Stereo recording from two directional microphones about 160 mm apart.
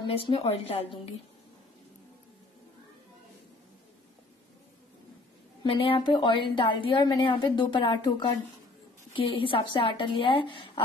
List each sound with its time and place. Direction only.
0.0 s a woman's voice: 30° left (ahead or behind)
5.6 s a woman's voice: 35° left (ahead or behind)